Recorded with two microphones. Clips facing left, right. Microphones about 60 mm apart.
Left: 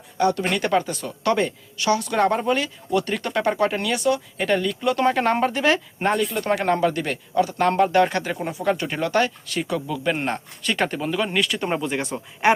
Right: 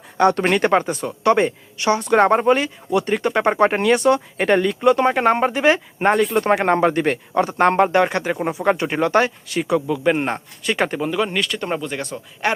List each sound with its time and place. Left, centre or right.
0.2 s speech: right
2.9 s speech: right
4.9 s speech: centre; by 7.9 s right
7.9 s speech: right; by 12.5 s centre